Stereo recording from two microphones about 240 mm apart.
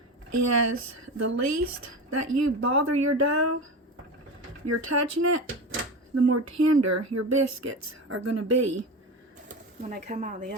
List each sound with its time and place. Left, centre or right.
0.3 s speech: right
4.6 s speech: right
6.1 s speech: right
9.8 s speech: right